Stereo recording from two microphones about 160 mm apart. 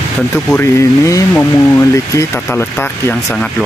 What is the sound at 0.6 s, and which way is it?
Speech, 20° left (ahead or behind).